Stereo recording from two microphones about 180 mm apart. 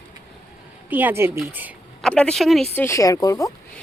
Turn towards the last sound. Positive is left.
turn(degrees=20)  # may be behind; listen again after turning